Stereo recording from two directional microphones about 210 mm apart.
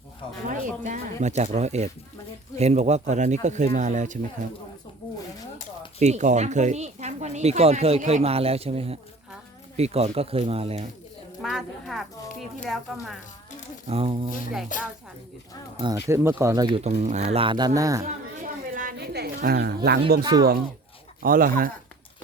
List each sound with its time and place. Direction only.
0.5 s speech: 35° right (ahead or behind)
6.0 s speech: 35° right (ahead or behind)
11.4 s a woman's voice: centre (ahead or behind)
13.8 s speech: 25° right (ahead or behind)
14.7 s a woman's voice: 40° left (ahead or behind)
16.0 s speech: 10° right (ahead or behind)
16.9 s speech: 35° right (ahead or behind)
17.3 s speech: 25° right (ahead or behind)
18.0 s a woman's voice: 40° right (ahead or behind)